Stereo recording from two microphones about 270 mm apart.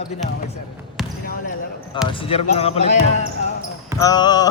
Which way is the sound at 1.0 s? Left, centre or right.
Centre.